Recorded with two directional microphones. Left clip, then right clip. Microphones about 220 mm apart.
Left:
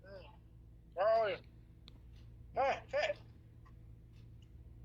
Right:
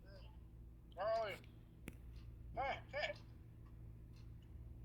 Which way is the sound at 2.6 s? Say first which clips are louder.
Left 9 dB; 35° left (ahead or behind).